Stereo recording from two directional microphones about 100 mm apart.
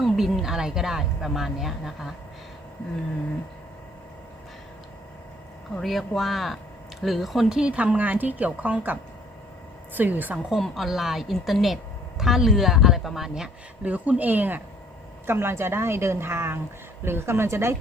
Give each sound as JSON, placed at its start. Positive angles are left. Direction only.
{"t": 0.0, "sound": "a woman's voice", "side_deg": 0}
{"t": 5.7, "sound": "a woman's voice", "side_deg": 0}
{"t": 10.0, "sound": "a woman's voice", "side_deg": -20}
{"t": 10.5, "sound": "a woman's voice", "side_deg": 0}